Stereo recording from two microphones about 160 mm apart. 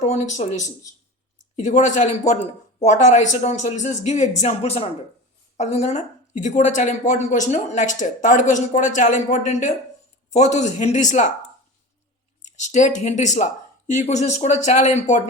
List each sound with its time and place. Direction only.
0.0 s a woman's voice: 45° left (ahead or behind)
12.4 s a woman's voice: 50° left (ahead or behind)